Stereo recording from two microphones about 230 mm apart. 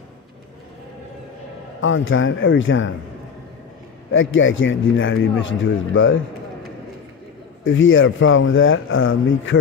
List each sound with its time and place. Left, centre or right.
1.8 s a man's voice: left
4.1 s a man's voice: left
7.6 s a man's voice: left